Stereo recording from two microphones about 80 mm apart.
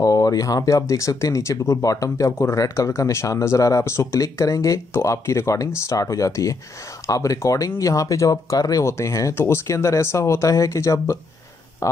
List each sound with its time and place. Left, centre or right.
0.0 s speech: left